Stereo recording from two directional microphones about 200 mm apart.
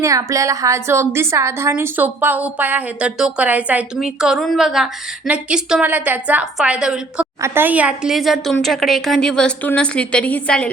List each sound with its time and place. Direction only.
0.0 s a woman's voice: 15° right (ahead or behind); by 10.7 s 5° left (ahead or behind)